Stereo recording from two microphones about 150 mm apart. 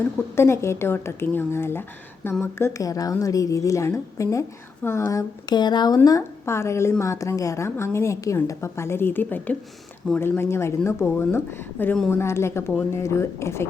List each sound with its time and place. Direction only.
0.3 s a woman's voice: 15° left (ahead or behind)